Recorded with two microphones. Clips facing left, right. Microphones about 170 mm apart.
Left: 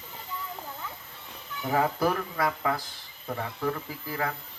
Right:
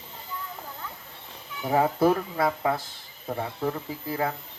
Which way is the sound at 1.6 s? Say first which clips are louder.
Right 4 dB; 25° right (ahead or behind).